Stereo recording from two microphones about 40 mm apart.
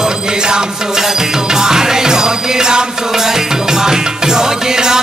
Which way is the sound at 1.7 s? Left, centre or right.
Centre.